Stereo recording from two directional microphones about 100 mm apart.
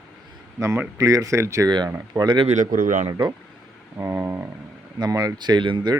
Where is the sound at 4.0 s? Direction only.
25° right (ahead or behind).